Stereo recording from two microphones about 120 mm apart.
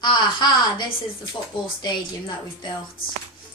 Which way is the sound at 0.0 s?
40° left (ahead or behind).